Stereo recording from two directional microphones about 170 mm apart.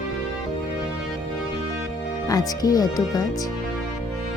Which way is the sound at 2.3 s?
20° left (ahead or behind).